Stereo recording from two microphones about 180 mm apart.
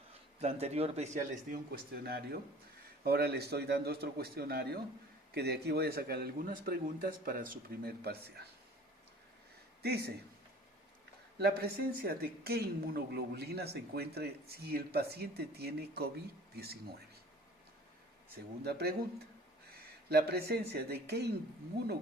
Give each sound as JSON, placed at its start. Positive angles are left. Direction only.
{"t": 0.1, "sound": "speech", "side_deg": -35}
{"t": 1.7, "sound": "a woman's voice", "side_deg": -60}
{"t": 9.8, "sound": "a man's voice", "side_deg": -60}
{"t": 11.3, "sound": "a woman's voice", "side_deg": -60}
{"t": 18.6, "sound": "a woman's voice", "side_deg": -65}
{"t": 20.1, "sound": "a woman's voice", "side_deg": -65}